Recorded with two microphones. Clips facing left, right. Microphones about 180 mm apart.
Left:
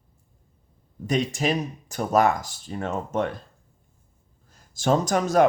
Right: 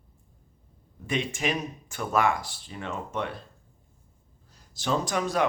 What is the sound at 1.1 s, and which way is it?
Speech, 40° left (ahead or behind).